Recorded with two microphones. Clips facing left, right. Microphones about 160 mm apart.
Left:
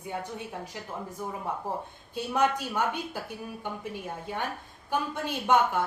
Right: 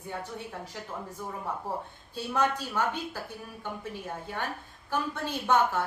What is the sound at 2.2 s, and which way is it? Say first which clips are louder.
A woman's voice: left 2 dB; 15° left (ahead or behind).